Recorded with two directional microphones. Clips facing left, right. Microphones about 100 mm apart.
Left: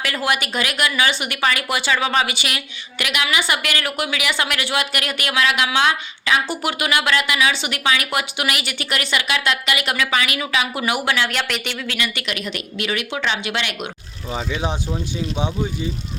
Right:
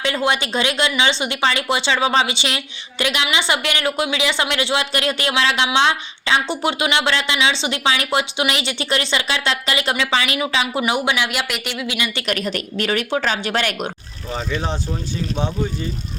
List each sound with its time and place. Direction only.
0.0 s speech: 25° right (ahead or behind)
11.3 s speech: 5° right (ahead or behind)
11.9 s speech: 20° right (ahead or behind)
12.2 s speech: 45° right (ahead or behind)
14.3 s speech: 10° left (ahead or behind)